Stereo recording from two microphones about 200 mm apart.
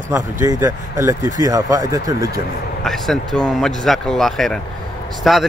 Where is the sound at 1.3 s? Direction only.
20° right (ahead or behind).